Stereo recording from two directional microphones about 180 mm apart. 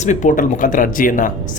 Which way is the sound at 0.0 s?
45° left (ahead or behind).